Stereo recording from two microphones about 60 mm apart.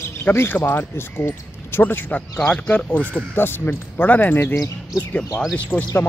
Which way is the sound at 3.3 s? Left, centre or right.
Left.